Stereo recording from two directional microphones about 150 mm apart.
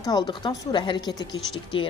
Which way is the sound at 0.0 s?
25° left (ahead or behind).